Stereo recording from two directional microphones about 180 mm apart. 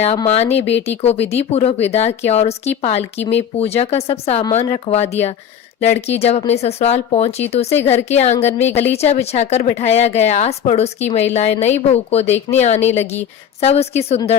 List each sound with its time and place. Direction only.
0.3 s speech: 35° left (ahead or behind)
7.8 s a woman's voice: 10° left (ahead or behind)
8.0 s speech: 40° left (ahead or behind)